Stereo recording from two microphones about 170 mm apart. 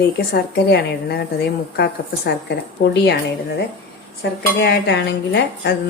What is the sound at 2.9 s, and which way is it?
Speech, 80° left.